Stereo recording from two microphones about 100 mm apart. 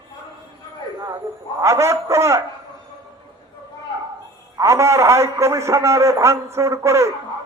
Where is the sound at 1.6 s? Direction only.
30° right (ahead or behind).